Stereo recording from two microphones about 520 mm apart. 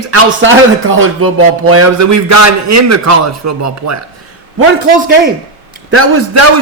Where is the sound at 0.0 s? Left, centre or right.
Right.